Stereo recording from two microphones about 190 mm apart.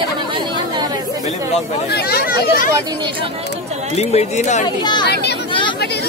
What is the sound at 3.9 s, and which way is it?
Speech, 35° left (ahead or behind).